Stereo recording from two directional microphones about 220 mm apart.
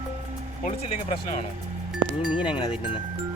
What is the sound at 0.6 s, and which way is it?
Speech, 30° left (ahead or behind).